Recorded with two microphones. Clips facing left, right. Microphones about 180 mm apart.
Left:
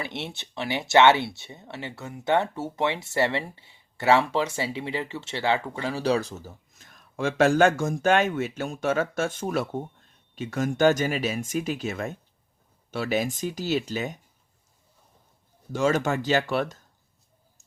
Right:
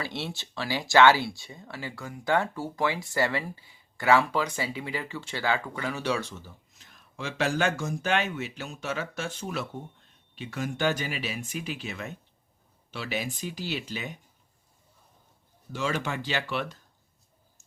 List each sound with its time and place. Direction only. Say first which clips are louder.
0.0 s speech: left 1 dB; 20° left (ahead or behind); by 14.2 s 45° left (ahead or behind)
15.7 s speech: left 7 dB; 45° left (ahead or behind)